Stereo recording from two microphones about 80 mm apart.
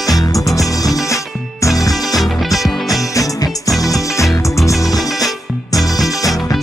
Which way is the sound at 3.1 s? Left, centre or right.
Left.